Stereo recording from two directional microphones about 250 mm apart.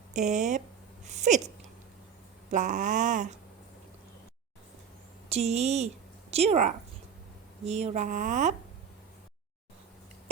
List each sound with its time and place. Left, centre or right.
0.1 s speech: right
2.5 s speech: right
5.3 s speech: right